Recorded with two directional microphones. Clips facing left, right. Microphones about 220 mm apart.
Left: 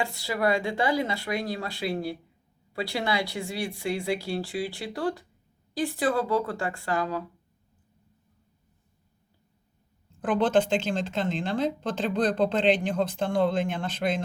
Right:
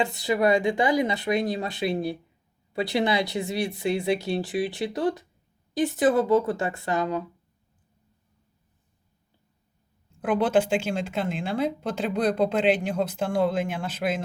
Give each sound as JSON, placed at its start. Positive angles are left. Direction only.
{"t": 0.0, "sound": "speech", "side_deg": -20}
{"t": 10.2, "sound": "speech", "side_deg": -10}